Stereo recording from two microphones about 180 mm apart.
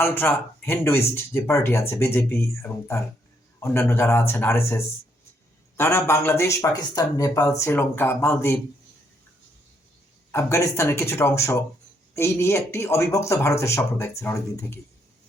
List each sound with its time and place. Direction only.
0.0 s speech: 10° left (ahead or behind)
10.3 s speech: 15° left (ahead or behind)